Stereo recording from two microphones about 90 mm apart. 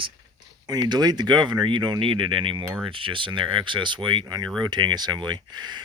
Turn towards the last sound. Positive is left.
turn(degrees=-50)  # may be behind; listen again after turning